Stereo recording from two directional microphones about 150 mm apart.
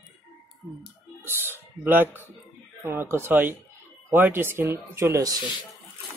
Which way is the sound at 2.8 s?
15° right (ahead or behind).